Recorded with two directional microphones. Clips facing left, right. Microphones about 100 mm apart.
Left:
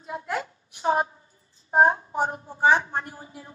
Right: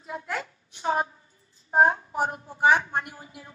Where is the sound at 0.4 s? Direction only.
30° left (ahead or behind).